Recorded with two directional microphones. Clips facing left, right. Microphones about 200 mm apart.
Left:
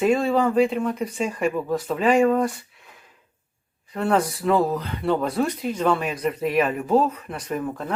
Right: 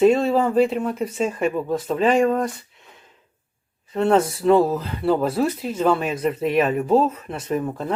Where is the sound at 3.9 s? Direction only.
25° right (ahead or behind).